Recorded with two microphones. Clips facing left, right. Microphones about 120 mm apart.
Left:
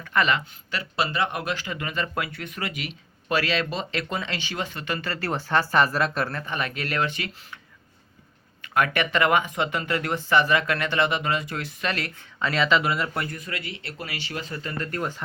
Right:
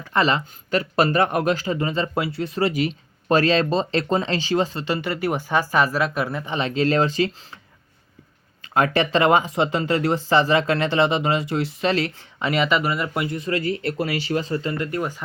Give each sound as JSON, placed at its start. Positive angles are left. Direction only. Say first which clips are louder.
{"t": 0.0, "sound": "speech", "louder": "right 3 dB", "side_deg": -30}
{"t": 8.6, "sound": "speech", "louder": "right 4 dB", "side_deg": -30}
{"t": 13.2, "sound": "speech", "louder": "right 10 dB", "side_deg": -25}